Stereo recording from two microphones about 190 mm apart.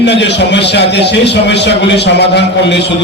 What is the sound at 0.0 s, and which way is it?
A man's voice, 65° left (ahead or behind).